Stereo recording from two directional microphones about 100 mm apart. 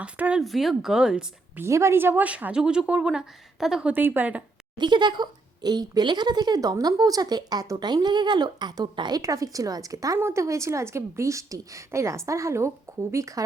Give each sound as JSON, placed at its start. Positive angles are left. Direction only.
{"t": 0.0, "sound": "speech", "side_deg": -10}
{"t": 0.4, "sound": "speech", "side_deg": 0}
{"t": 1.5, "sound": "speech", "side_deg": -30}
{"t": 4.8, "sound": "speech", "side_deg": -50}
{"t": 9.2, "sound": "a woman's voice", "side_deg": -35}